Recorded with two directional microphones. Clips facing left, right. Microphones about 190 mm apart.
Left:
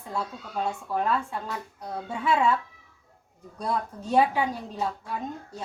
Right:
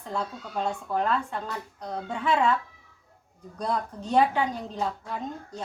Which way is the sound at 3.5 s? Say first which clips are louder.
Even; 5° left (ahead or behind).